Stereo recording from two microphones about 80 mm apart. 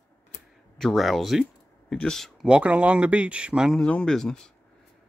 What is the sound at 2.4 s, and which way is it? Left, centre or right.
Speech, centre.